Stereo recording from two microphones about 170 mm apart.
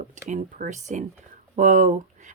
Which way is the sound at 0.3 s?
45° right (ahead or behind).